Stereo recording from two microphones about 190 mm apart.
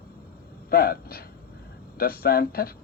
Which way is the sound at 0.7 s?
50° left (ahead or behind).